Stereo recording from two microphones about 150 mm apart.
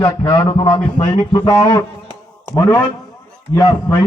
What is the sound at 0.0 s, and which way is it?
A man's voice, 30° left (ahead or behind).